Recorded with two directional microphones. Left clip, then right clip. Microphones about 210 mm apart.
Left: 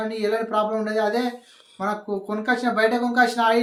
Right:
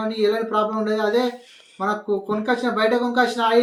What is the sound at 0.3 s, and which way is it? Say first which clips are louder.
Speech: even; 15° left (ahead or behind).